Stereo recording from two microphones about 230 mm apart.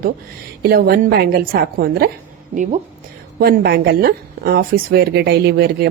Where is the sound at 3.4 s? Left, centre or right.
Right.